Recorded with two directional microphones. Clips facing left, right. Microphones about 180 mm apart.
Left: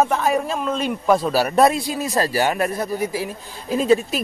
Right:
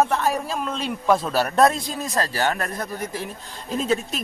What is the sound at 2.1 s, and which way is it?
Speech, 15° left (ahead or behind).